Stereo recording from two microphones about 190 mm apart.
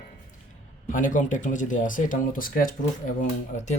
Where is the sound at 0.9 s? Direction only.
45° left (ahead or behind).